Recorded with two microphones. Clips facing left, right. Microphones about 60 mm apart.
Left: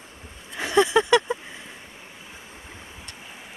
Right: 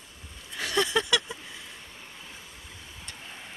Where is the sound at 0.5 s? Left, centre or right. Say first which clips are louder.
Left 7 dB; left.